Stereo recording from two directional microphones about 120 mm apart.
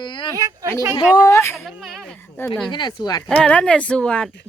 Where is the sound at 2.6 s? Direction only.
40° left (ahead or behind).